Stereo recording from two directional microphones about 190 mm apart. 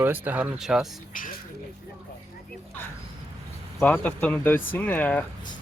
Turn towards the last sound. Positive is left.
turn(degrees=10)  # may be behind; listen again after turning